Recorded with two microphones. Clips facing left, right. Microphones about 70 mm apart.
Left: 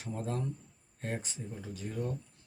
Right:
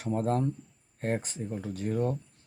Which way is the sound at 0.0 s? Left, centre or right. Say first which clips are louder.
Right 9 dB; right.